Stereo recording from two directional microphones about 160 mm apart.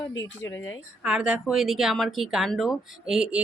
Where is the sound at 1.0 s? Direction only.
5° right (ahead or behind).